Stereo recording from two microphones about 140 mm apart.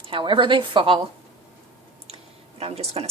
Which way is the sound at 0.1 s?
35° right (ahead or behind).